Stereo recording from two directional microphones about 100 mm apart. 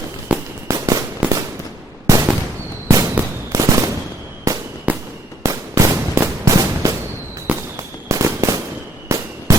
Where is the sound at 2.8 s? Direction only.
30° right (ahead or behind).